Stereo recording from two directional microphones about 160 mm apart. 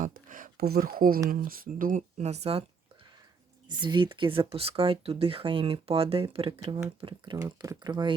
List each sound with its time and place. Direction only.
0.0 s a sound: 55° right (ahead or behind)
1.3 s speech: 65° right (ahead or behind); by 2.6 s 40° right (ahead or behind)
3.7 s speech: 30° right (ahead or behind)